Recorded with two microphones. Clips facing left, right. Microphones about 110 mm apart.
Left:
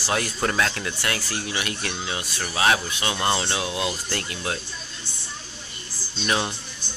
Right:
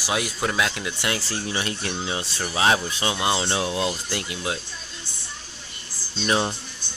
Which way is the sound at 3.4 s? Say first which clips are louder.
Right 2 dB; 30° right (ahead or behind).